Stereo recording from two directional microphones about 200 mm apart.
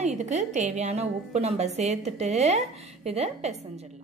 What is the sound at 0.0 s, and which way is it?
A woman's voice, 35° right (ahead or behind).